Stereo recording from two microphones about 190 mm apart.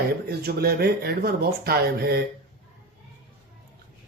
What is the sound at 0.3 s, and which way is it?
Speech, 55° right (ahead or behind).